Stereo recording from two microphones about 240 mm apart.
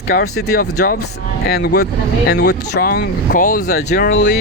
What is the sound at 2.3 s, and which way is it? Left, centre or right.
Speech, left.